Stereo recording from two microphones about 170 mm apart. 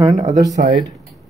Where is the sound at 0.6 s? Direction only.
50° right (ahead or behind).